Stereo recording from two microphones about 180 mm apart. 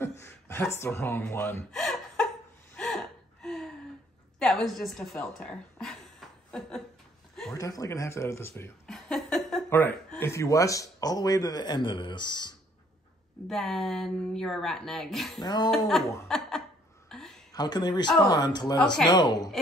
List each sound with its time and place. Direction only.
0.2 s speech: 15° left (ahead or behind)
2.7 s gasp: 5° left (ahead or behind)
4.4 s speech: centre (ahead or behind)
5.2 s a sound: 5° left (ahead or behind)
7.5 s speech: 20° left (ahead or behind)
8.8 s chuckle: centre (ahead or behind)
9.7 s speech: 10° left (ahead or behind)
13.5 s speech: centre (ahead or behind)
15.4 s speech: 25° left (ahead or behind)
16.3 s laughter: centre (ahead or behind)
17.1 s a sound: centre (ahead or behind)
17.5 s speech: 20° left (ahead or behind)